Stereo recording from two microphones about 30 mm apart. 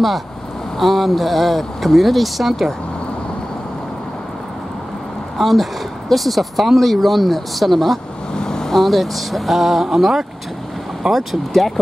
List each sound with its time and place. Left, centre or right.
0.7 s speech: centre
5.4 s speech: centre
8.4 s vehicle: left
8.7 s speech: centre